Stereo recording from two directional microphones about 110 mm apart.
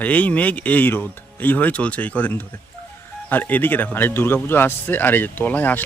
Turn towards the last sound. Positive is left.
turn(degrees=15)  # may be behind; listen again after turning